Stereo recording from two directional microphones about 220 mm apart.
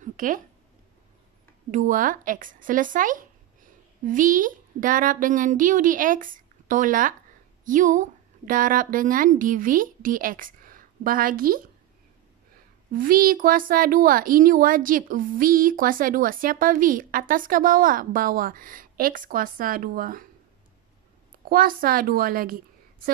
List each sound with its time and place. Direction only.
0.0 s a sound: 35° right (ahead or behind)
1.7 s a woman's voice: 35° right (ahead or behind)
12.9 s speech: 40° right (ahead or behind)
21.5 s speech: 40° right (ahead or behind)